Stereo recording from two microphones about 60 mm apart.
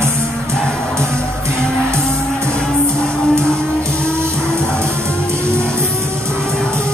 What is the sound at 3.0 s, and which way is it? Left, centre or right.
Music, centre.